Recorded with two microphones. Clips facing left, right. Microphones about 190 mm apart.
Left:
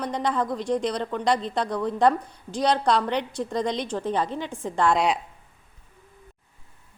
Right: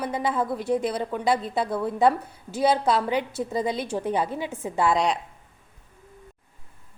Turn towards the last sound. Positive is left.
turn(degrees=0)  # may be behind; listen again after turning